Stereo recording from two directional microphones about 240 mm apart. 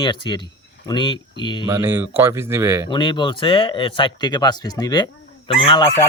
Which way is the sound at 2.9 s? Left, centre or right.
Centre.